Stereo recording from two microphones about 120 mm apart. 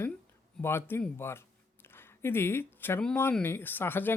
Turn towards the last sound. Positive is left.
turn(degrees=15)  # may be behind; listen again after turning